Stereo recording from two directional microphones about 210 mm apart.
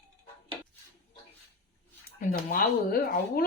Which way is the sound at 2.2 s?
40° left (ahead or behind).